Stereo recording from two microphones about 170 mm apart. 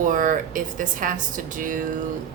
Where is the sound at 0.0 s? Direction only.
50° right (ahead or behind).